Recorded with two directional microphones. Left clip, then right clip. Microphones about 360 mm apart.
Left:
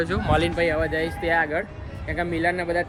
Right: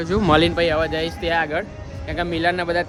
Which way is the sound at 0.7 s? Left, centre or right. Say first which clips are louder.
Right 3 dB; centre.